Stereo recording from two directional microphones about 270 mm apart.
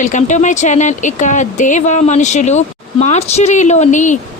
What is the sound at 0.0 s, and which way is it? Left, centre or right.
A woman's voice, left.